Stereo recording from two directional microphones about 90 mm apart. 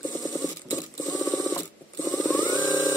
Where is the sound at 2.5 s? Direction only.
40° left (ahead or behind).